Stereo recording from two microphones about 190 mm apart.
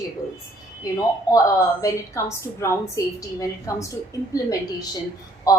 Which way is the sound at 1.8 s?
15° left (ahead or behind).